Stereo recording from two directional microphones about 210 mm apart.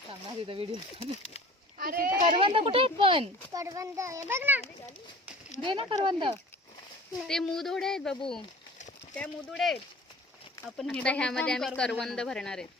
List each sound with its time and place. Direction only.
0.1 s a child's voice: 25° right (ahead or behind)
1.1 s speech: 30° left (ahead or behind)
1.8 s a child's voice: 40° right (ahead or behind)
2.4 s a child's voice: 25° right (ahead or behind); by 4.6 s 10° right (ahead or behind)
5.6 s a child's voice: 25° right (ahead or behind)
7.3 s speech: centre (ahead or behind)
9.1 s speech: 5° left (ahead or behind)